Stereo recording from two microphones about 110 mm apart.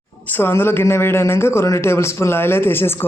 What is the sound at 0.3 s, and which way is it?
Speech, 20° left (ahead or behind).